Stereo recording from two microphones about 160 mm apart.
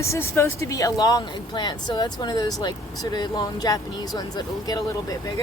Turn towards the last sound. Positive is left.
turn(degrees=25)  # may be behind; listen again after turning